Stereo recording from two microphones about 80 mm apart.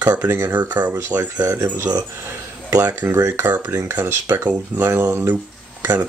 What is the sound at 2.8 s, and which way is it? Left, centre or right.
Speech, right.